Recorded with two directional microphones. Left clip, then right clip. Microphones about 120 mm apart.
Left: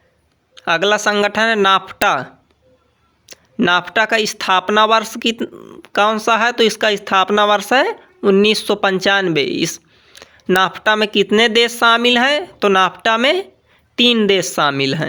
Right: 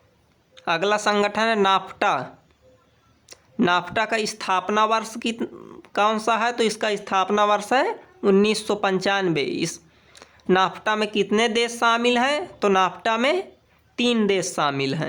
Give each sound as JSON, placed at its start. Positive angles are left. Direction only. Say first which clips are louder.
{"t": 0.6, "sound": "speech", "louder": "left 6 dB", "side_deg": 20}
{"t": 3.3, "sound": "a sound", "louder": "left 7 dB", "side_deg": 20}
{"t": 3.7, "sound": "speech", "louder": "left 7 dB", "side_deg": 25}
{"t": 5.4, "sound": "speech", "louder": "left 5 dB", "side_deg": 15}
{"t": 5.8, "sound": "speech", "louder": "left 6 dB", "side_deg": 25}
{"t": 9.3, "sound": "a sound", "louder": "left 7 dB", "side_deg": 30}
{"t": 10.5, "sound": "a woman's voice", "louder": "left 6 dB", "side_deg": 25}